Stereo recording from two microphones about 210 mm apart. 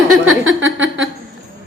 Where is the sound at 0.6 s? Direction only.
65° right (ahead or behind).